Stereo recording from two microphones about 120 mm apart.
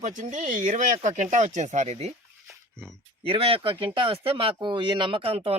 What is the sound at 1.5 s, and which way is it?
Speech, 75° right (ahead or behind).